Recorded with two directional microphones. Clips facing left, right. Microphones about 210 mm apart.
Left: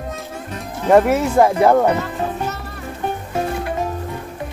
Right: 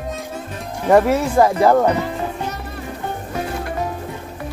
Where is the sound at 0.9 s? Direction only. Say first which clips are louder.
Left 1 dB; 15° left (ahead or behind).